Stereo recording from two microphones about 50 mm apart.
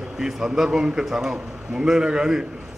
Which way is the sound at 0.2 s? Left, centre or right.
Centre.